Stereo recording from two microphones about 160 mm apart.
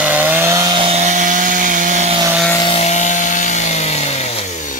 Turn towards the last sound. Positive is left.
turn(degrees=50)  # may be behind; listen again after turning